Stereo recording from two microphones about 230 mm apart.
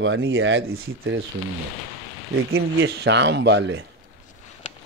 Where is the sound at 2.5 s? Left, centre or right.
Right.